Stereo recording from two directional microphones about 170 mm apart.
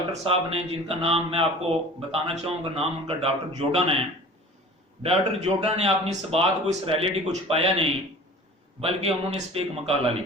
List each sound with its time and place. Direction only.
0.1 s speech: 35° right (ahead or behind)
5.0 s speech: 35° right (ahead or behind)